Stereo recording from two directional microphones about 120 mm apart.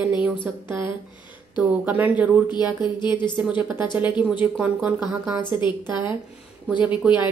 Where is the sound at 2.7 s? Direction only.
40° left (ahead or behind).